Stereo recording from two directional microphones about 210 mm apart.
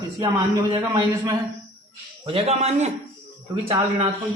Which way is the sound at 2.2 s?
30° right (ahead or behind).